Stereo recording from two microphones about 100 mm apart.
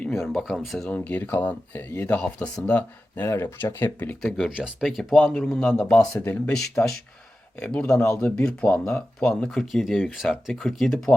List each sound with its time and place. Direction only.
0.3 s speech: centre (ahead or behind)
0.9 s speech: 15° left (ahead or behind)
3.2 s speech: 25° left (ahead or behind)
4.2 s speech: 5° left (ahead or behind)
5.3 s speech: 15° left (ahead or behind)